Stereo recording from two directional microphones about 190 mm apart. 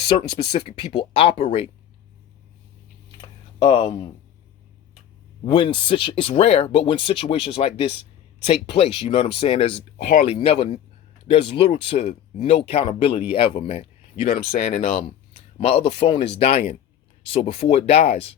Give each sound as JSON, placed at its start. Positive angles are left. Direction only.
{"t": 0.0, "sound": "speech", "side_deg": 30}
{"t": 3.2, "sound": "a sound", "side_deg": 25}
{"t": 5.5, "sound": "speech", "side_deg": 25}
{"t": 14.3, "sound": "speech", "side_deg": 50}
{"t": 14.6, "sound": "speech", "side_deg": 40}